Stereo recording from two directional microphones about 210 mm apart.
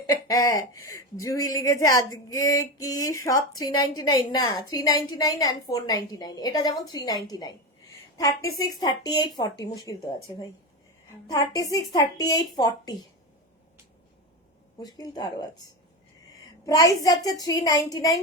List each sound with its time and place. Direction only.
0.1 s speech: 15° left (ahead or behind)
11.3 s a woman's voice: 15° left (ahead or behind)
14.8 s a woman's voice: 20° left (ahead or behind)
16.6 s speech: 15° left (ahead or behind)